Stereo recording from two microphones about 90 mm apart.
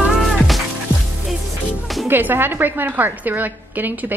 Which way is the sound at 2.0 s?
25° right (ahead or behind).